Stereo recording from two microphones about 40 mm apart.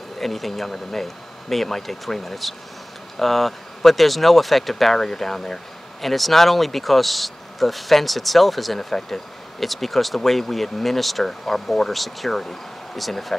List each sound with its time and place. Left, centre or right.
0.2 s speech: centre